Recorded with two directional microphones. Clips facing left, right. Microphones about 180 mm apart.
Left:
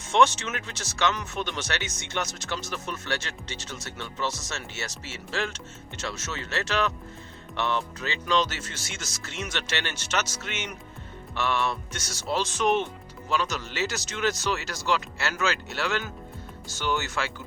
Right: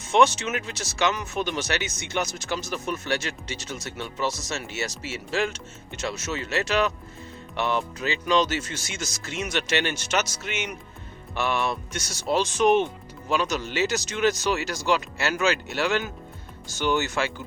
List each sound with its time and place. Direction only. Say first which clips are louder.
0.1 s speech: right 2 dB; 10° right (ahead or behind)